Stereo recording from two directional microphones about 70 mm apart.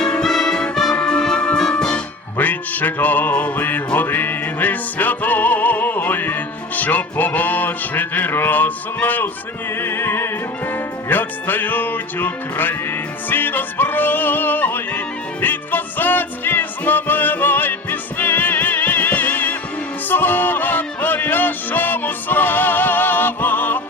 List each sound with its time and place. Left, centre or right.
0.0 s music: centre
2.4 s music: left